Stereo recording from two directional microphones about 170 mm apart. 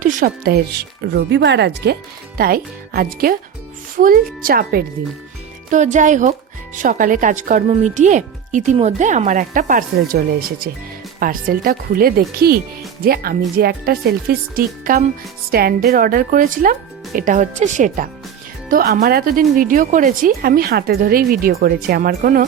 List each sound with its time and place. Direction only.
0.0 s speech: 55° right (ahead or behind)
1.0 s speech: 90° right
2.4 s speech: 60° right (ahead or behind)
5.7 s speech: 45° right (ahead or behind)
11.2 s speech: 55° right (ahead or behind)
18.7 s speech: 60° right (ahead or behind)